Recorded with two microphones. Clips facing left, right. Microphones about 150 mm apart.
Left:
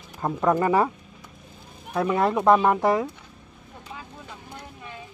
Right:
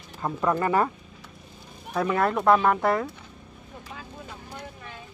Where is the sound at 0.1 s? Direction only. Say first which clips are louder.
Left 3 dB; 20° left (ahead or behind).